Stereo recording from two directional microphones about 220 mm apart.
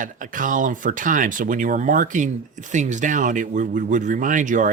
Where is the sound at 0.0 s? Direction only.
35° right (ahead or behind).